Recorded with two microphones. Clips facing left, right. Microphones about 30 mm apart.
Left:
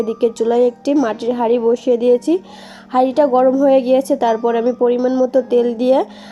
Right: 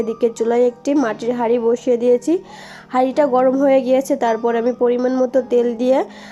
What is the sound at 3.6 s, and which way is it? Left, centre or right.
Speech, left.